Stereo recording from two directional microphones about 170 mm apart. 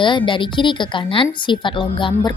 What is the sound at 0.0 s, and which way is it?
A woman's voice, 30° left (ahead or behind).